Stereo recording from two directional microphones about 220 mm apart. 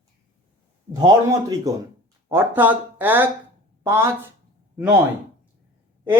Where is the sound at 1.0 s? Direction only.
15° right (ahead or behind).